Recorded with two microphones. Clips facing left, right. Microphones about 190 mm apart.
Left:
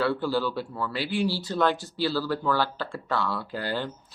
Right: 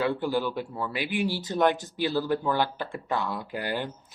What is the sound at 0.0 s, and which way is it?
Speech, 20° right (ahead or behind).